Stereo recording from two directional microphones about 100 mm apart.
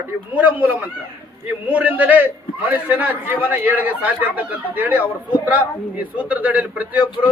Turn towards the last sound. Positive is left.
turn(degrees=-15)  # may be behind; listen again after turning